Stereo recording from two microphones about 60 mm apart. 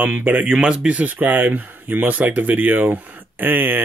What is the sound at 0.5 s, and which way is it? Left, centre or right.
Speech, centre.